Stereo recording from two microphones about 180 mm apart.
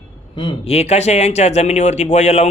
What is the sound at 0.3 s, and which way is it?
Speech, 30° left (ahead or behind).